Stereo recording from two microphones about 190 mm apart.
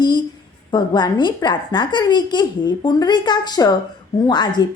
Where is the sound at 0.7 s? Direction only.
20° left (ahead or behind).